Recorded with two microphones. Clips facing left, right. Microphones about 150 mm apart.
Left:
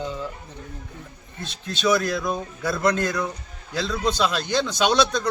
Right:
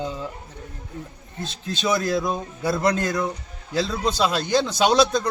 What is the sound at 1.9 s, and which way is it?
A man's voice, 25° right (ahead or behind).